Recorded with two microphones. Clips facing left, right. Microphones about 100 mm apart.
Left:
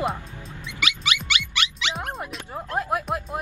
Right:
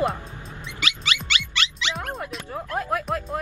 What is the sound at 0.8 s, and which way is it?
Dog, 15° left (ahead or behind).